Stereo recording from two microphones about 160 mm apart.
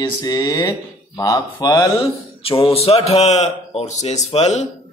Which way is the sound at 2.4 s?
35° left (ahead or behind).